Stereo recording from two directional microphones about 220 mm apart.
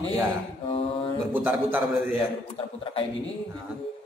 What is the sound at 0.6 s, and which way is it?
Speech, 25° left (ahead or behind).